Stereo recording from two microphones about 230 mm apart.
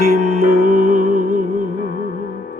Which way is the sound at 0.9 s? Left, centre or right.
Right.